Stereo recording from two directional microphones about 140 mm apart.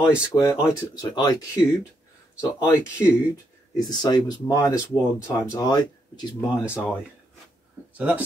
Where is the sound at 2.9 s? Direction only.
20° left (ahead or behind).